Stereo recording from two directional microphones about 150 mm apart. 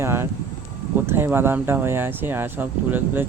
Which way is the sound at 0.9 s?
15° right (ahead or behind).